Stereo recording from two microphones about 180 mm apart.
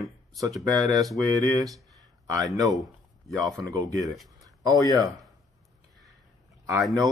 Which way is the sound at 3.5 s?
20° right (ahead or behind).